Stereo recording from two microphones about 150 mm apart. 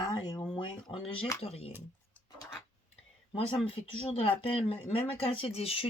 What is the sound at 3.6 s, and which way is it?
Speech, 40° left (ahead or behind).